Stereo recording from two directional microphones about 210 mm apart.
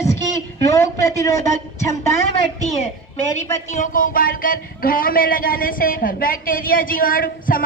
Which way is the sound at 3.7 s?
40° left (ahead or behind).